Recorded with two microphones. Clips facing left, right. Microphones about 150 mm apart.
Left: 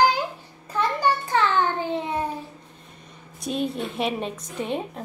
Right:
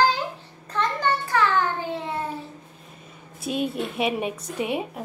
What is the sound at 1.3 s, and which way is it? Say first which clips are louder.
Child singing: left 1 dB; 20° left (ahead or behind).